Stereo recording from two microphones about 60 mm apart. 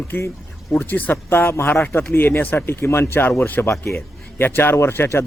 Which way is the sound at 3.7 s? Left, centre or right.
Left.